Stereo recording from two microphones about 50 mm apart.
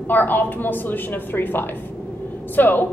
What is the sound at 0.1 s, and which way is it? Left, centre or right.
A woman's voice, left.